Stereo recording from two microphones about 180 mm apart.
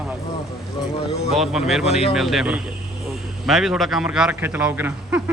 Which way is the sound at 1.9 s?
35° left (ahead or behind).